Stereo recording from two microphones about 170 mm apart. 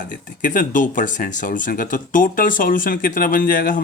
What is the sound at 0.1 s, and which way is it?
Speech, 50° left (ahead or behind).